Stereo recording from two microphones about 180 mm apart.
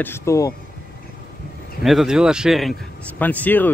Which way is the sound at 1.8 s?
Centre (ahead or behind).